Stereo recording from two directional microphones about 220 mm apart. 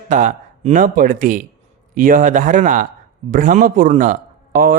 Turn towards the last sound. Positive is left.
turn(degrees=-40)  # may be behind; listen again after turning